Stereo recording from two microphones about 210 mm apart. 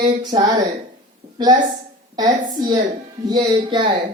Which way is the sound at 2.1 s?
20° right (ahead or behind).